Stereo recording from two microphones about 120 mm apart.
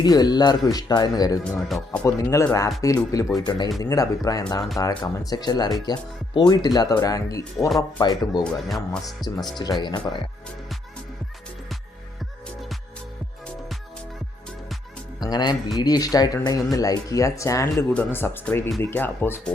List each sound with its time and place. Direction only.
0.0 s speech: 35° left (ahead or behind)
1.5 s speech: 5° left (ahead or behind)
2.3 s speech: 25° left (ahead or behind)
8.4 s speech: 5° left (ahead or behind)
9.2 s speech: 35° left (ahead or behind)
15.3 s speech: 35° left (ahead or behind)
17.9 s speech: 15° left (ahead or behind)